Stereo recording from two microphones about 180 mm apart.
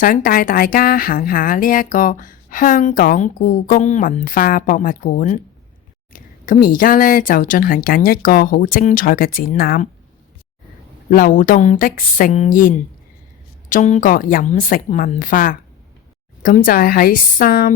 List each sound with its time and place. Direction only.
0.0 s speech: 50° left (ahead or behind)
11.1 s speech: 50° left (ahead or behind)